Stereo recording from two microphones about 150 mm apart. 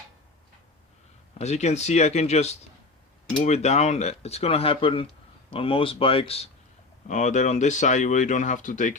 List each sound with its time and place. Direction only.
1.4 s speech: 50° left (ahead or behind)
7.1 s speech: 55° left (ahead or behind)